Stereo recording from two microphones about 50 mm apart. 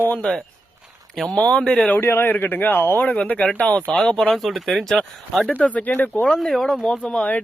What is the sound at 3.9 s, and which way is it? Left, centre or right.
Speech, centre.